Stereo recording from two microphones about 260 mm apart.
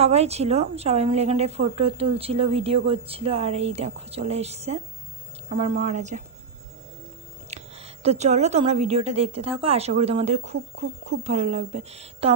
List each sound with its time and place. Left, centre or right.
0.0 s a woman's voice: right
7.5 s a woman's voice: right